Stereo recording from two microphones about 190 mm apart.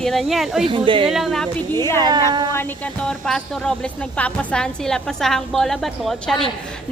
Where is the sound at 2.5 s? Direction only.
10° left (ahead or behind).